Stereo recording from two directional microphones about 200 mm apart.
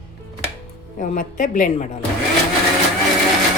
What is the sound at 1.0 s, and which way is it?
Speech, 40° left (ahead or behind).